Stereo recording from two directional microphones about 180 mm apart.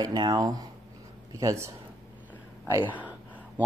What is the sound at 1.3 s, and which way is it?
Speech, 15° right (ahead or behind).